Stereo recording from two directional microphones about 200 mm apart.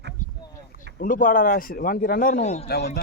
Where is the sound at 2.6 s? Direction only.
55° left (ahead or behind).